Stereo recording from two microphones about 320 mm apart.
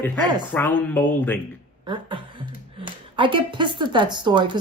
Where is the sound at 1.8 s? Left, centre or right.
Centre.